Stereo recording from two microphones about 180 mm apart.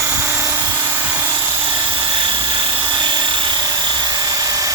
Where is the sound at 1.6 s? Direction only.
25° right (ahead or behind).